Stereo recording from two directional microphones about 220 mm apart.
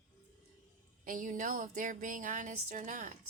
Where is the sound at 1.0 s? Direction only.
35° right (ahead or behind).